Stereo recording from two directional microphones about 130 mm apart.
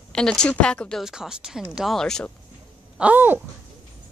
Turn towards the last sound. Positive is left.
turn(degrees=-15)  # may be behind; listen again after turning